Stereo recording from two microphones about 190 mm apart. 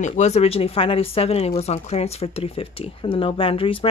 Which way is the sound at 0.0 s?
35° left (ahead or behind).